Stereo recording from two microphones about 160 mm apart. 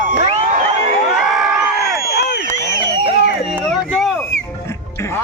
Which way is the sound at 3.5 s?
5° right (ahead or behind).